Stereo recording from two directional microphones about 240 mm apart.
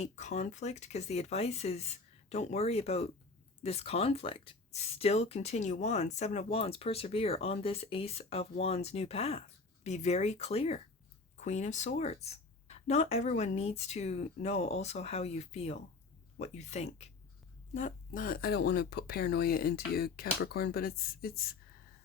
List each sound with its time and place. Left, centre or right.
0.0 s speech: left